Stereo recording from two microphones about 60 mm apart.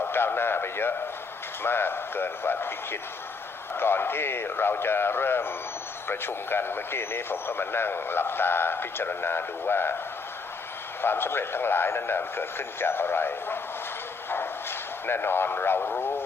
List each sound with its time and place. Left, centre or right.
0.0 s speech: left
11.0 s speech: left
14.3 s a sound: left
15.8 s speech: left